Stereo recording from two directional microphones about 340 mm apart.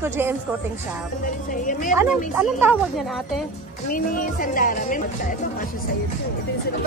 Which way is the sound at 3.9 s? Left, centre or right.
Left.